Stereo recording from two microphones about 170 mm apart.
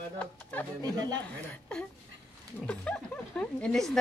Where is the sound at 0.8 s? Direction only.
25° right (ahead or behind).